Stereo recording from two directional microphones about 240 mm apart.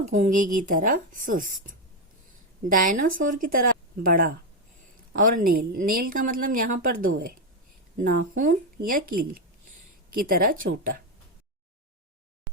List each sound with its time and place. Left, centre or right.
0.0 s a woman's voice: right
10.2 s a woman's voice: right